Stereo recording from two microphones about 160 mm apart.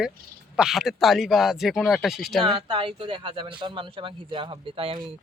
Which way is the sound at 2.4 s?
30° right (ahead or behind).